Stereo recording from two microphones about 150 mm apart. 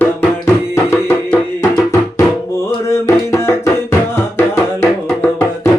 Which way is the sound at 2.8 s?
20° left (ahead or behind).